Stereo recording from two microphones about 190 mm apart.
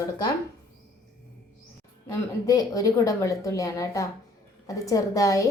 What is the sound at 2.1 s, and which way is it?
A woman's voice, 15° left (ahead or behind).